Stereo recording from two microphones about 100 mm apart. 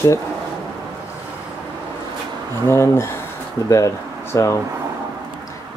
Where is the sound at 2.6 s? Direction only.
25° left (ahead or behind).